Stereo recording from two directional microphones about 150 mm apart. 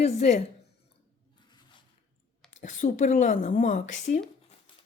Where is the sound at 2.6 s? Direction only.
55° left (ahead or behind).